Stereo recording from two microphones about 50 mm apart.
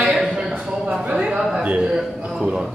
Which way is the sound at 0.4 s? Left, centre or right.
Right.